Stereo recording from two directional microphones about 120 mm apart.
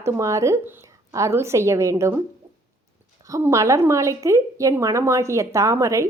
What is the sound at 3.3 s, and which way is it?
Speech, 25° right (ahead or behind).